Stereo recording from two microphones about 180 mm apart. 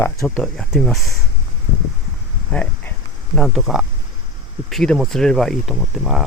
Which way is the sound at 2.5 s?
10° left (ahead or behind).